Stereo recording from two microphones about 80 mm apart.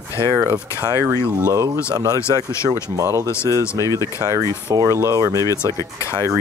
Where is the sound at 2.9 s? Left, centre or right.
Right.